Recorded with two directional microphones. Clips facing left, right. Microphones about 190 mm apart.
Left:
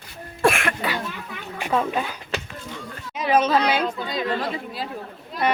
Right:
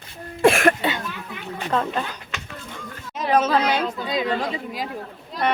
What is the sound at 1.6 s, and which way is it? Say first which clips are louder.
A woman's voice: left 1 dB; 10° left (ahead or behind).